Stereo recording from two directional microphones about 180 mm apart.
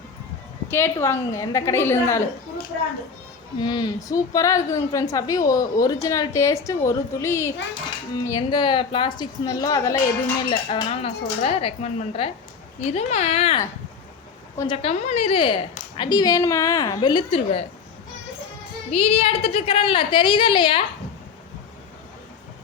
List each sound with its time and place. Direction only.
0.7 s a woman's voice: 15° left (ahead or behind)
3.6 s a woman's voice: 25° left (ahead or behind)
10.5 s a woman's voice: 30° left (ahead or behind)
14.8 s a woman's voice: 40° left (ahead or behind)
18.9 s a woman's voice: 35° left (ahead or behind)